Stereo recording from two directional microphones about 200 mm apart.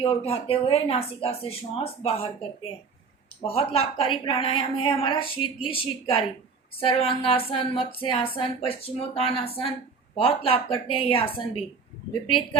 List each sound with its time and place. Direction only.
0.0 s speech: 30° left (ahead or behind)